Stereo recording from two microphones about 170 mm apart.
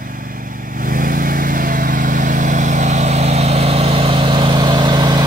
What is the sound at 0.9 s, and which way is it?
Vehicle, 55° right (ahead or behind).